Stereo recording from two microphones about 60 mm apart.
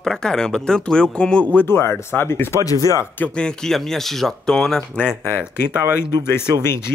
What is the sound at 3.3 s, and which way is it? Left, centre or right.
Speech, centre.